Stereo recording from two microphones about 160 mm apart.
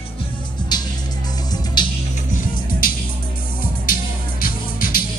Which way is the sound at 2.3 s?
60° left (ahead or behind).